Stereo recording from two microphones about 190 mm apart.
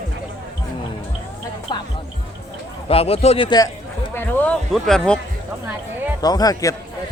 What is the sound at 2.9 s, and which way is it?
Speech, 30° left (ahead or behind).